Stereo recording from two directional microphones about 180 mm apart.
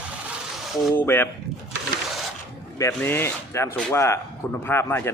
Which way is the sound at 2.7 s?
15° left (ahead or behind).